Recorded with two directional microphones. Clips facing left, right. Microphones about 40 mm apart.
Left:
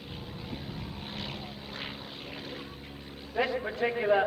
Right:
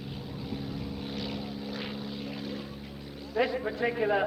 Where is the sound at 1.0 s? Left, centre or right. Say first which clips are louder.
Right 3 dB; left.